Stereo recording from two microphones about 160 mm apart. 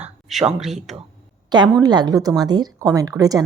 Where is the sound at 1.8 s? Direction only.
25° right (ahead or behind).